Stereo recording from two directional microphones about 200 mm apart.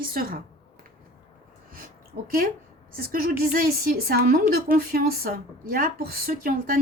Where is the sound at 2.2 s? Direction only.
50° right (ahead or behind).